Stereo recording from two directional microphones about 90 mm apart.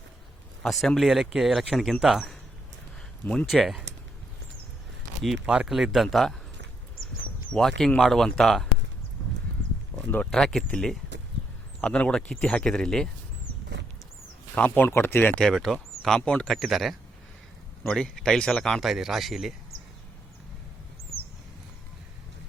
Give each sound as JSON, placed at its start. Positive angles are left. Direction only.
{"t": 0.6, "sound": "speech", "side_deg": 5}
{"t": 3.4, "sound": "speech", "side_deg": 0}
{"t": 5.2, "sound": "speech", "side_deg": -5}
{"t": 7.5, "sound": "speech", "side_deg": 10}
{"t": 9.9, "sound": "a sound", "side_deg": -5}
{"t": 10.2, "sound": "speech", "side_deg": 5}
{"t": 14.5, "sound": "speech", "side_deg": 15}
{"t": 15.4, "sound": "speech", "side_deg": 5}